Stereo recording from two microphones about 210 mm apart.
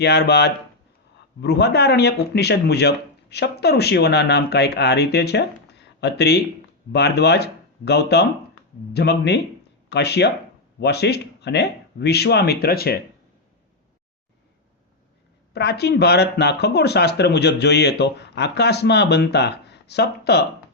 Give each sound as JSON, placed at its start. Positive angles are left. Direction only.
{"t": 0.0, "sound": "speech", "side_deg": 50}
{"t": 15.5, "sound": "speech", "side_deg": 50}